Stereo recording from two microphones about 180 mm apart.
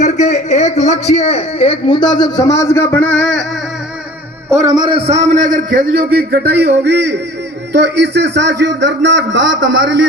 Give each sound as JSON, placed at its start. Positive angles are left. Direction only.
{"t": 0.0, "sound": "speech", "side_deg": 40}
{"t": 4.4, "sound": "a man's voice", "side_deg": -15}
{"t": 5.0, "sound": "a man's voice", "side_deg": -35}